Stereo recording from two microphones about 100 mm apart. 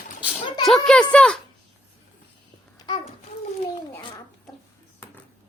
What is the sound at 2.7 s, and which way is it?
Babbling, 45° left (ahead or behind).